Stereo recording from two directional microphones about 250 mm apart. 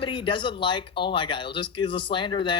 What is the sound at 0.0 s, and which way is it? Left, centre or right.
Speech, centre.